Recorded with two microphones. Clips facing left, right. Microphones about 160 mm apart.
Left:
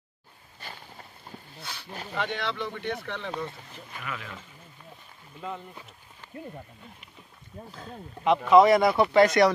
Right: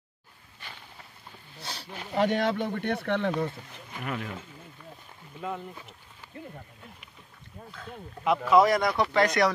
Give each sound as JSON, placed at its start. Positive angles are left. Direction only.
{"t": 1.6, "sound": "a sound", "side_deg": -35}
{"t": 2.1, "sound": "speech", "side_deg": -45}
{"t": 4.0, "sound": "speech", "side_deg": -45}
{"t": 6.2, "sound": "wild animals", "side_deg": -10}
{"t": 8.2, "sound": "speech", "side_deg": 0}